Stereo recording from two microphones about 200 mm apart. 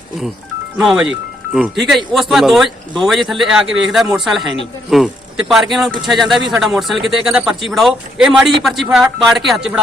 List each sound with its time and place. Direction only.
0.8 s a man's voice: 5° right (ahead or behind)